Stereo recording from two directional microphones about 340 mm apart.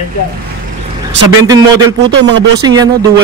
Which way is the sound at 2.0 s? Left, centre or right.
Right.